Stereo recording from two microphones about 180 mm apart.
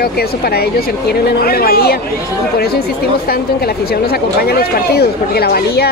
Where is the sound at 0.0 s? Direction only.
60° left (ahead or behind).